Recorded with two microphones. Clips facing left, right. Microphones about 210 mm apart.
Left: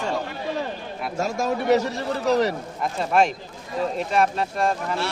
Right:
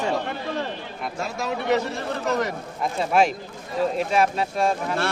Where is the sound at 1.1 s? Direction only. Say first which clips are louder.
Left 5 dB; 45° left (ahead or behind).